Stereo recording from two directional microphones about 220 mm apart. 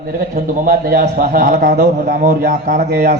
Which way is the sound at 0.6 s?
40° right (ahead or behind).